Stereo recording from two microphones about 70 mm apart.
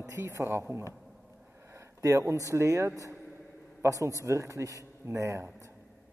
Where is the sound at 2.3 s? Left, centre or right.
Right.